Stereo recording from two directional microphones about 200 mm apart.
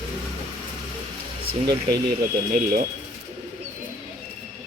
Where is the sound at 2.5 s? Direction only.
45° right (ahead or behind).